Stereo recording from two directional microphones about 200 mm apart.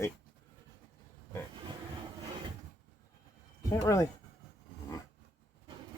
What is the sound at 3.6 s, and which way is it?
Speech, 15° left (ahead or behind).